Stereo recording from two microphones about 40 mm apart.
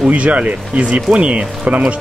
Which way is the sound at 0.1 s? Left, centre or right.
Right.